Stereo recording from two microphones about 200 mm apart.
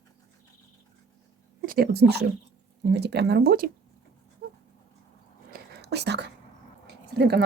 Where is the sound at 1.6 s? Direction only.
45° right (ahead or behind).